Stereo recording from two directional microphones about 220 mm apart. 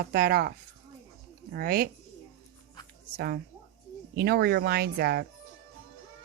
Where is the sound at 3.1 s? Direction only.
45° right (ahead or behind).